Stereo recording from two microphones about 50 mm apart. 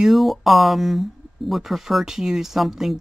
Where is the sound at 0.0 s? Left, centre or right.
Centre.